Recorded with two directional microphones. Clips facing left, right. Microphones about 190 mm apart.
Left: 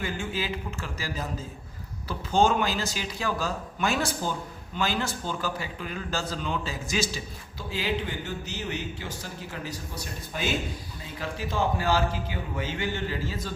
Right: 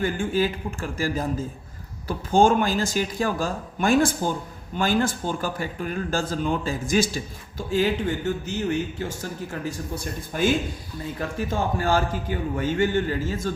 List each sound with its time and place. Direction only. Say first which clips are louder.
0.0 s speech: right 8 dB; 50° right (ahead or behind)